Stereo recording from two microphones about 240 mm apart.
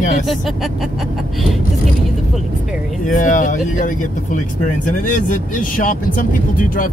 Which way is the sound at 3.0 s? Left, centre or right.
Left.